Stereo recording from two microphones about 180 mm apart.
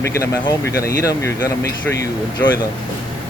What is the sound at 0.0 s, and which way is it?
Speech, 15° left (ahead or behind).